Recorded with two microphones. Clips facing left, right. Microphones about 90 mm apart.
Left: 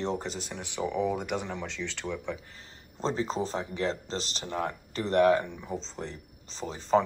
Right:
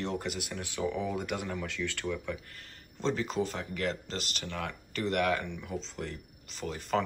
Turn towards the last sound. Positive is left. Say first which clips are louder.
# left 6 dB
turn(degrees=25)  # may be behind; listen again after turning